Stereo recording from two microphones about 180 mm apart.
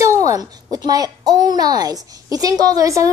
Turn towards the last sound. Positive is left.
turn(degrees=-15)  # may be behind; listen again after turning